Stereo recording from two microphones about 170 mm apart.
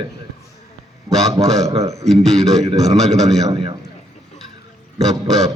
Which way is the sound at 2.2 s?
Centre (ahead or behind).